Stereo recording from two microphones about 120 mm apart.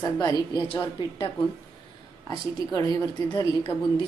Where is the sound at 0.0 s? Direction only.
35° left (ahead or behind).